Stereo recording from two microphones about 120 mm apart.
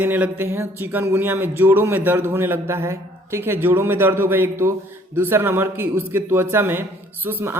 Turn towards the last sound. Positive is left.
turn(degrees=-20)  # may be behind; listen again after turning